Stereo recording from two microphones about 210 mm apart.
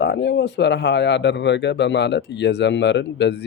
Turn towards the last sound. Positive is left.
turn(degrees=55)  # may be behind; listen again after turning